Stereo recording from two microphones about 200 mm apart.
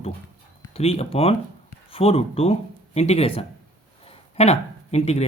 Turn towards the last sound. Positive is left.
turn(degrees=30)  # may be behind; listen again after turning